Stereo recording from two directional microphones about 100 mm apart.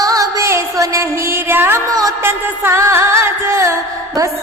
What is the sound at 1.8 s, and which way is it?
Music, 35° right (ahead or behind).